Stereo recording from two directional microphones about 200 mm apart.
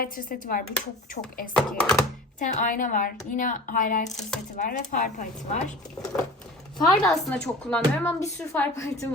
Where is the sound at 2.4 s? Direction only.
40° left (ahead or behind).